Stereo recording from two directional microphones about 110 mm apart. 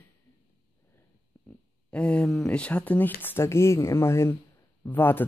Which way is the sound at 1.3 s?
20° left (ahead or behind).